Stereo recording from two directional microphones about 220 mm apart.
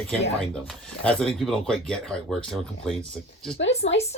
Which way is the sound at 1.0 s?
5° left (ahead or behind).